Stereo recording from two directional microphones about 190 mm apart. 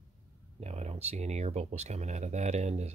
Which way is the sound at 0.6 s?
35° right (ahead or behind).